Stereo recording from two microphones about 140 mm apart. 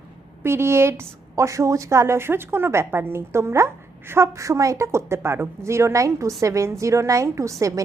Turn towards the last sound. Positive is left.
turn(degrees=-25)  # may be behind; listen again after turning